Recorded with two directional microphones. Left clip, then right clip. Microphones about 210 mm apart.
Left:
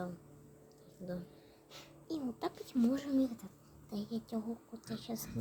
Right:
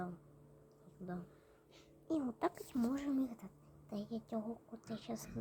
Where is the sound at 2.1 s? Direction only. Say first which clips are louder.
Right 2 dB; 10° right (ahead or behind).